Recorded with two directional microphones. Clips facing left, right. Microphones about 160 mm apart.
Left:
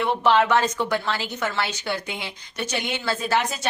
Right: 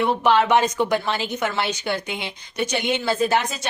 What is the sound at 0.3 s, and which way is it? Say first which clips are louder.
A woman's voice: right 1 dB; 15° right (ahead or behind).